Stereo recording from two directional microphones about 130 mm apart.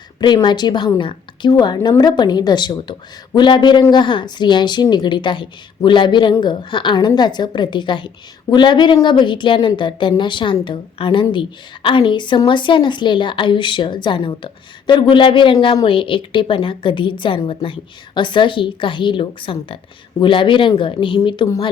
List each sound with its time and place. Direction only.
0.2 s a woman's voice: 35° left (ahead or behind)